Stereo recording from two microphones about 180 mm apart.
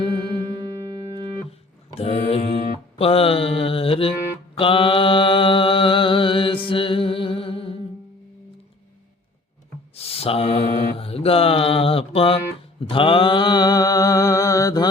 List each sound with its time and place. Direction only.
0.2 s music: 20° right (ahead or behind)
2.0 s mantra: 35° left (ahead or behind)
9.9 s mantra: 35° left (ahead or behind)